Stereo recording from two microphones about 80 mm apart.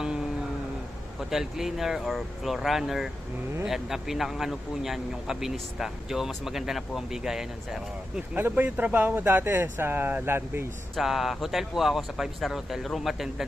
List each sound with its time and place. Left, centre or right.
1.2 s speech: centre
8.4 s speech: right
10.9 s speech: centre